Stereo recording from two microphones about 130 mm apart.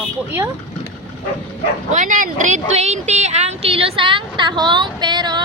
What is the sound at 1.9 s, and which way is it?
Speech, 75° right (ahead or behind).